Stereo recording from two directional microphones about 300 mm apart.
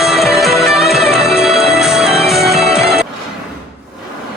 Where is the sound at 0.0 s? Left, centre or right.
Centre.